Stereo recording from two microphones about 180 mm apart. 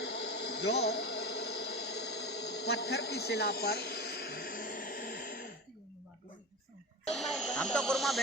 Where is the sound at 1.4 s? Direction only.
65° left (ahead or behind); by 5.4 s 50° left (ahead or behind).